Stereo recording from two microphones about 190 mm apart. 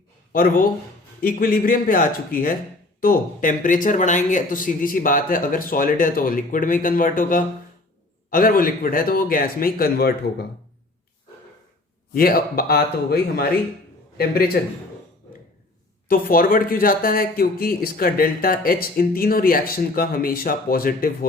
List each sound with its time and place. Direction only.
0.3 s speech: 50° left (ahead or behind)
12.1 s a man's voice: 50° left (ahead or behind)
16.0 s speech: 50° left (ahead or behind)